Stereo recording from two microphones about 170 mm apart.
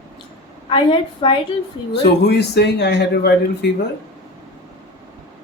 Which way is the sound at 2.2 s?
80° left.